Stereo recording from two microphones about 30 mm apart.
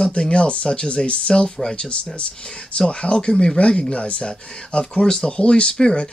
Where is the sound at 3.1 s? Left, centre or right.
Left.